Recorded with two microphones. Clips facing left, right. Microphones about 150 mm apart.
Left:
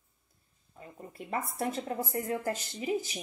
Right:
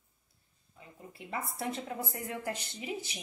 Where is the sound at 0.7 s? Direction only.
45° left (ahead or behind).